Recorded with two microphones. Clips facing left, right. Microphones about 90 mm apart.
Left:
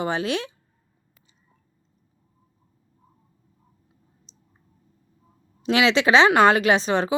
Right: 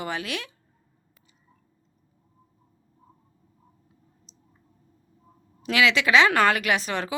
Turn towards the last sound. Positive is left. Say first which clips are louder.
# left 6 dB
turn(degrees=25)  # may be behind; listen again after turning